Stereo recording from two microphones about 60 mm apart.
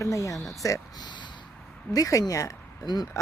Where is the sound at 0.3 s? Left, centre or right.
Centre.